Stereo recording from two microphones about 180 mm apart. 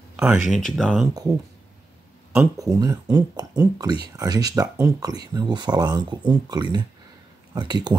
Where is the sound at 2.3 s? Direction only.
20° right (ahead or behind).